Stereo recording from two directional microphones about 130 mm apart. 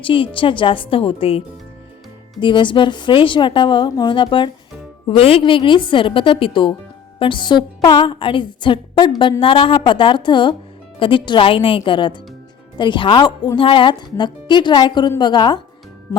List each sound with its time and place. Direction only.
0.0 s a woman's voice: 40° left (ahead or behind)
2.4 s speech: 40° left (ahead or behind)